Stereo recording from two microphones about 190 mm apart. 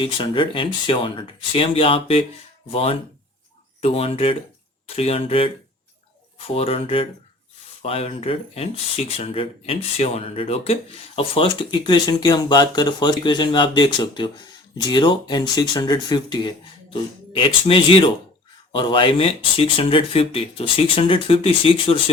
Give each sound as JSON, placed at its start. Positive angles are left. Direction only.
{"t": 0.0, "sound": "speech", "side_deg": 25}
{"t": 6.5, "sound": "speech", "side_deg": 30}